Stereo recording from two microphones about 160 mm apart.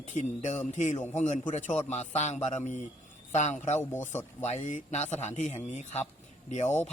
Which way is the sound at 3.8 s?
15° left (ahead or behind).